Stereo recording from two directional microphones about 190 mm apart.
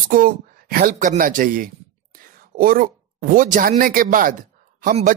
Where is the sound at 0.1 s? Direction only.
50° right (ahead or behind).